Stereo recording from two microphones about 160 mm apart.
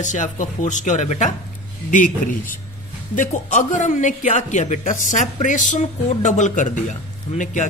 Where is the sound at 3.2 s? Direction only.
55° left (ahead or behind).